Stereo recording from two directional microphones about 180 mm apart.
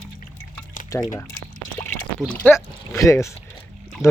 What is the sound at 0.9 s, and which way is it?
Speech, 20° left (ahead or behind).